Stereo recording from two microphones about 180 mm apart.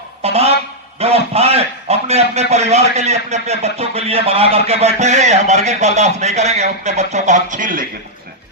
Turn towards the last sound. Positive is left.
turn(degrees=-50)  # may be behind; listen again after turning